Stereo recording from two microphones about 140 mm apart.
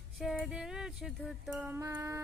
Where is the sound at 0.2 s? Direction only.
5° right (ahead or behind).